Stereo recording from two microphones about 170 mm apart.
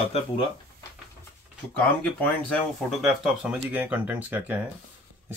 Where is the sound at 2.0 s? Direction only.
5° left (ahead or behind).